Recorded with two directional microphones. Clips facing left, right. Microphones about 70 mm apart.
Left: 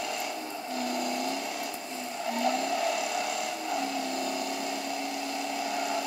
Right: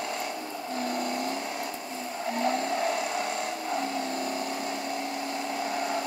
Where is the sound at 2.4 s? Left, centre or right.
Right.